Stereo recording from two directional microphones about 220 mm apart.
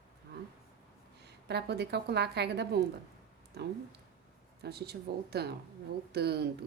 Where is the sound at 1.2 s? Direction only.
50° right (ahead or behind).